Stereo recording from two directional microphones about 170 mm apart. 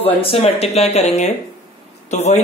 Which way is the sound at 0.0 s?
35° left (ahead or behind).